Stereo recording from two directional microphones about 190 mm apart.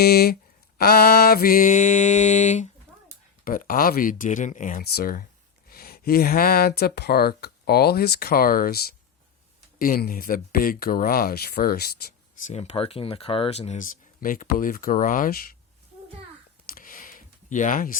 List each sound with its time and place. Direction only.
0.0 s speech: 55° left (ahead or behind)
4.8 s speech: 55° left (ahead or behind)
12.5 s speech: 30° left (ahead or behind); by 15.4 s 50° left (ahead or behind)
16.7 s a sound: 45° left (ahead or behind)